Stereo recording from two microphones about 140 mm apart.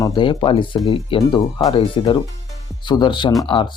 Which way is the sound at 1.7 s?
35° left (ahead or behind).